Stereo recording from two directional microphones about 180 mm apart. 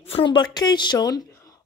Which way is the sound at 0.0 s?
30° left (ahead or behind).